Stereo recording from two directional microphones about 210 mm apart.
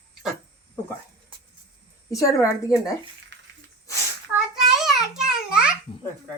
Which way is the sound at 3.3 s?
55° right (ahead or behind).